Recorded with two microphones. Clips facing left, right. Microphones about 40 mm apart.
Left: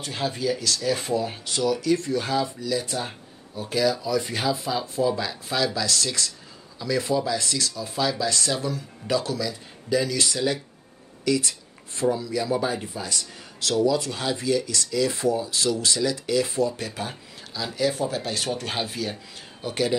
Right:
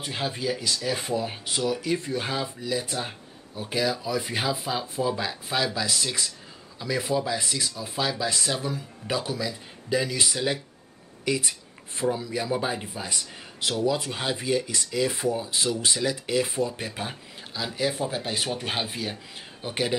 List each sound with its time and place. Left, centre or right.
0.0 s speech: centre
2.9 s speech: centre